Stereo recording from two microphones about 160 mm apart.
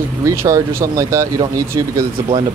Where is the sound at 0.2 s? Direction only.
20° right (ahead or behind).